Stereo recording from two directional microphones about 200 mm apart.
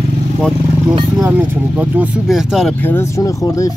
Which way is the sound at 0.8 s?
15° right (ahead or behind).